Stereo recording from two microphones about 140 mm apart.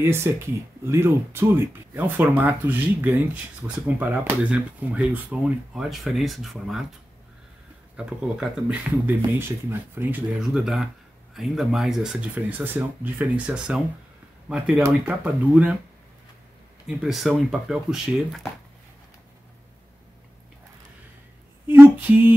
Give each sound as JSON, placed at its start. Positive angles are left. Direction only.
{"t": 0.0, "sound": "speech", "side_deg": -15}
{"t": 7.9, "sound": "speech", "side_deg": -5}
{"t": 10.4, "sound": "speech", "side_deg": -5}
{"t": 16.8, "sound": "speech", "side_deg": -5}
{"t": 21.6, "sound": "a sound", "side_deg": -15}